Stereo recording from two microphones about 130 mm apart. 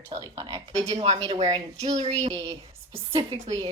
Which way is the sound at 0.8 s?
50° right (ahead or behind).